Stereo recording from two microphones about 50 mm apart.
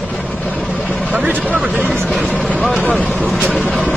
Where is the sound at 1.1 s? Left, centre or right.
Right.